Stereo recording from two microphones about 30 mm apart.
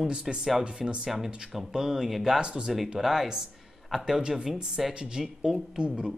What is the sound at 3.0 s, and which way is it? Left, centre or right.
Speech, centre.